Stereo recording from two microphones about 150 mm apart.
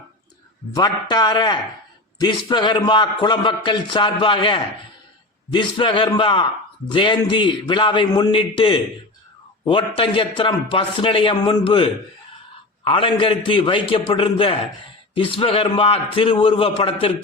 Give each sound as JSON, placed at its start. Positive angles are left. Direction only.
{"t": 0.7, "sound": "a man's voice", "side_deg": 25}